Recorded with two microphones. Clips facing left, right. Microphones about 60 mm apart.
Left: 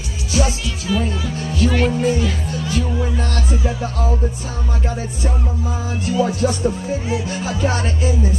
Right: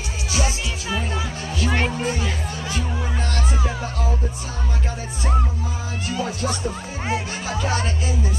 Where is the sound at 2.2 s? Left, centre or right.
Right.